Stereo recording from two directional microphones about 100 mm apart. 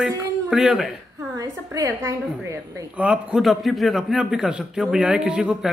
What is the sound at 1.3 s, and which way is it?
A woman's voice, 35° right (ahead or behind).